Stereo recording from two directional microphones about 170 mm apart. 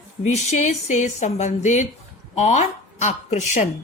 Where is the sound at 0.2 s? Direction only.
45° left (ahead or behind).